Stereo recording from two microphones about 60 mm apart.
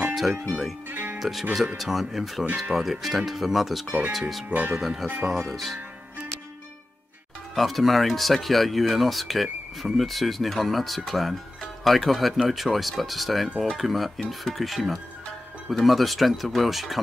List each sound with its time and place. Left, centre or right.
0.1 s music: centre
0.8 s speech: right
1.8 s speech: centre
4.5 s speech: right
4.7 s speech: centre
5.0 s speech: right
5.3 s speech: centre
7.5 s speech: centre